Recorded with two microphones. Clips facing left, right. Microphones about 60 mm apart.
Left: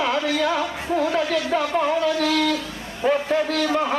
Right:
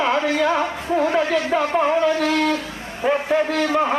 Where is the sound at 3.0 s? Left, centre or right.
Centre.